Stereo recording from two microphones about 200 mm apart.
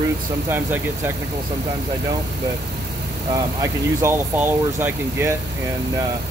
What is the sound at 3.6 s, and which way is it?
Speech, 10° right (ahead or behind).